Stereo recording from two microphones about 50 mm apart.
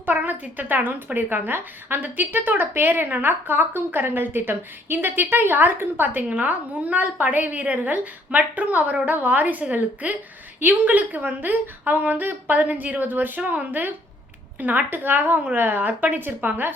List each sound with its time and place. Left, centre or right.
0.3 s a woman's voice: right
6.4 s a woman's voice: right